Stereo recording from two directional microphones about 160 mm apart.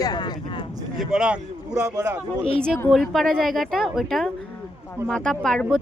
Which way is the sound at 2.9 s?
Centre (ahead or behind).